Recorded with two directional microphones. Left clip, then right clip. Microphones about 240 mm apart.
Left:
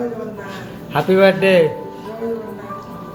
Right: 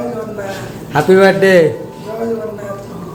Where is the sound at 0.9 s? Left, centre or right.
Centre.